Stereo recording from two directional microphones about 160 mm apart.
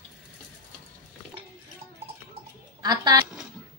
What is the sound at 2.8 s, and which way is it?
Speech, 25° right (ahead or behind).